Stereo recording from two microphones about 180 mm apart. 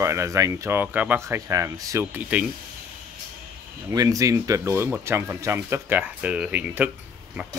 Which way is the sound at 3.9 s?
20° right (ahead or behind).